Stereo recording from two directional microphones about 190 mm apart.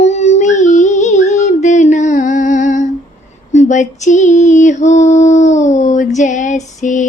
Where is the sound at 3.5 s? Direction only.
40° left (ahead or behind).